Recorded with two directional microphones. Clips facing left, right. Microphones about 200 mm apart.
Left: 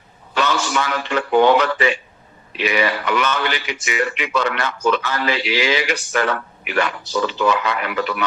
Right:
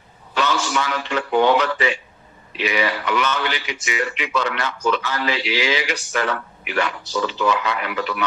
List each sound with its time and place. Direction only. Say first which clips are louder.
0.3 s a man's voice: left 1 dB; 55° left (ahead or behind)